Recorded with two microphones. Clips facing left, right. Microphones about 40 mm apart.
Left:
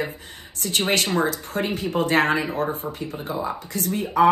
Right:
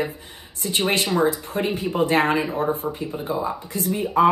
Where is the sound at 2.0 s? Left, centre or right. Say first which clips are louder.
Right 1 dB; left.